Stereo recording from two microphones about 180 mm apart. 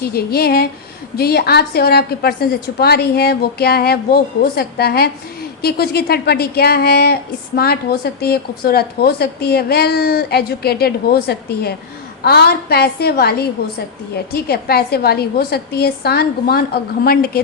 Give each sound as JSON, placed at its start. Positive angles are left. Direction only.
{"t": 0.0, "sound": "a woman's voice", "side_deg": 60}